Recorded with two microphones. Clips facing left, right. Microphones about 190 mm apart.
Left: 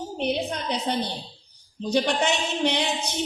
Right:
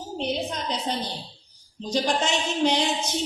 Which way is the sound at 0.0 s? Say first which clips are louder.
Left 2 dB; 60° left (ahead or behind).